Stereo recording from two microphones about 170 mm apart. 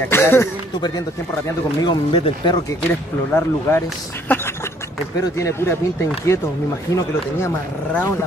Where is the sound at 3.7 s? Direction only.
15° left (ahead or behind).